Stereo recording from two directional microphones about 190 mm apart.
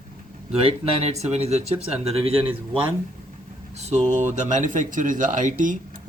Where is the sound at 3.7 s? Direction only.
35° right (ahead or behind).